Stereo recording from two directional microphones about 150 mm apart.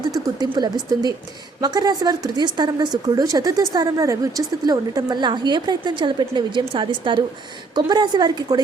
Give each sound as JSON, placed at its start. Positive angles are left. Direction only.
{"t": 0.0, "sound": "a woman's voice", "side_deg": -25}